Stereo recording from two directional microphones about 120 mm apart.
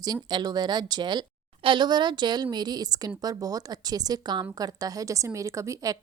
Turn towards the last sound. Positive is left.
turn(degrees=-25)  # may be behind; listen again after turning